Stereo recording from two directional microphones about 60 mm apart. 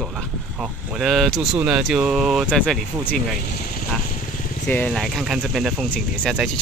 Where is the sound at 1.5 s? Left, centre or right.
Centre.